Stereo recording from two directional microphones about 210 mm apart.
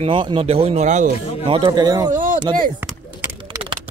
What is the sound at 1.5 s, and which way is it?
Speech, 20° right (ahead or behind).